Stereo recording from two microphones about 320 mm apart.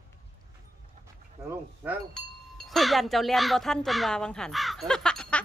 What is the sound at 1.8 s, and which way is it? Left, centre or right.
Speech, centre.